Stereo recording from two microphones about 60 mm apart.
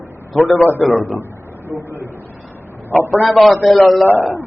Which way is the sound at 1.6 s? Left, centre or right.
Right.